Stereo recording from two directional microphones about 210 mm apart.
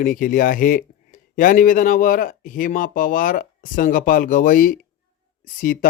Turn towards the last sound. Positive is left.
turn(degrees=40)  # may be behind; listen again after turning